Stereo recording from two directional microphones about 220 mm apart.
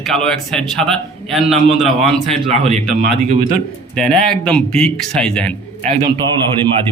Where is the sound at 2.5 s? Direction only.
30° right (ahead or behind).